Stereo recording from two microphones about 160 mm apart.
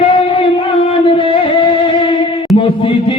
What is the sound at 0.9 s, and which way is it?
Music, 35° left (ahead or behind).